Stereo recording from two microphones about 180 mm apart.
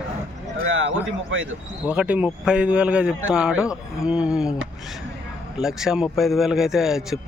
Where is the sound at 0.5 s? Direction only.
90° right.